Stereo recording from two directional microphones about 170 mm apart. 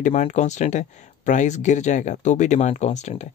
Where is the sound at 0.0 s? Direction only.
45° left (ahead or behind).